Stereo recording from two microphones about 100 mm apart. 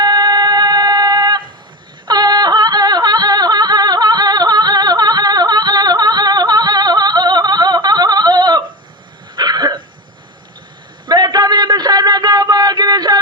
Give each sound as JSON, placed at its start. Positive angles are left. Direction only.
{"t": 0.0, "sound": "music", "side_deg": -45}
{"t": 9.3, "sound": "throat clearing", "side_deg": -45}
{"t": 11.0, "sound": "a sound", "side_deg": -45}